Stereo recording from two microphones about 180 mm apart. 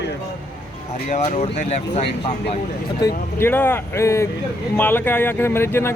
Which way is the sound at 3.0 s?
15° left (ahead or behind).